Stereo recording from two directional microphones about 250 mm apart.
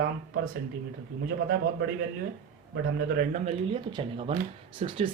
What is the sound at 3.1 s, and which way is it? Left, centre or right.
Speech, right.